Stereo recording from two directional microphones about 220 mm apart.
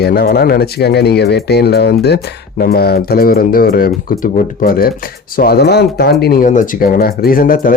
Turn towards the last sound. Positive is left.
turn(degrees=40)  # may be behind; listen again after turning